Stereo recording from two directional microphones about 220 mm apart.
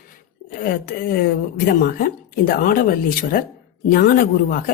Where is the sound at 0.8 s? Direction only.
45° left (ahead or behind).